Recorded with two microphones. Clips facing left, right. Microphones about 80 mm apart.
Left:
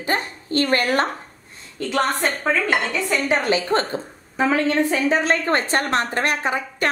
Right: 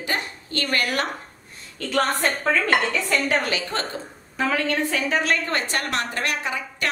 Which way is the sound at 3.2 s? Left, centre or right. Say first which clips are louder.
Left 4 dB; left.